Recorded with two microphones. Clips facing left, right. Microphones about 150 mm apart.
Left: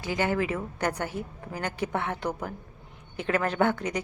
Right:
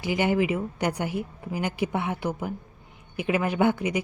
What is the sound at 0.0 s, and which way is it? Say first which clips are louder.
A woman's voice: right 3 dB; 15° right (ahead or behind).